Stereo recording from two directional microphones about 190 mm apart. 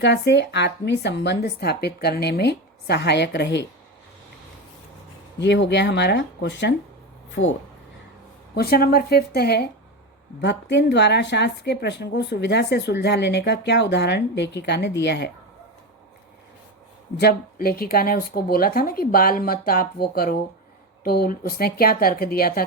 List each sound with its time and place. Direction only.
0.0 s a woman's voice: 65° left (ahead or behind)
5.4 s a woman's voice: 65° left (ahead or behind)
8.5 s a woman's voice: 55° left (ahead or behind)
17.2 s speech: 55° left (ahead or behind)